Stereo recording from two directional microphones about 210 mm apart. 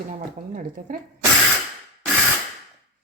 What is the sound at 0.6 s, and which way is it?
Speech, 40° right (ahead or behind).